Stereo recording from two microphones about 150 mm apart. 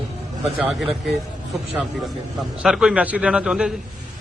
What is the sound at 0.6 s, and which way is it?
Speech, centre (ahead or behind).